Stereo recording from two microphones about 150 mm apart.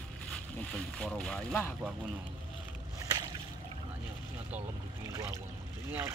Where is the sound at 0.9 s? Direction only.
5° left (ahead or behind).